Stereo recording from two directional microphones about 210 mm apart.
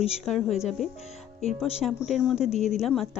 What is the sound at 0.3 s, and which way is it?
Speech, centre (ahead or behind).